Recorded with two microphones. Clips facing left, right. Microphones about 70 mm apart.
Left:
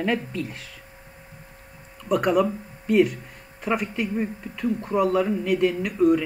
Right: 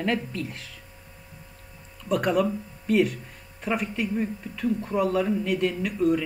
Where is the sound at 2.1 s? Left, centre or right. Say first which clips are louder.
Left 3 dB; centre.